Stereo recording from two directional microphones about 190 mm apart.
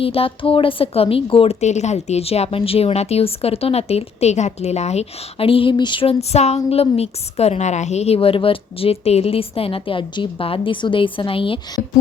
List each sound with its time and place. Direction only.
0.0 s a woman's voice: 30° left (ahead or behind)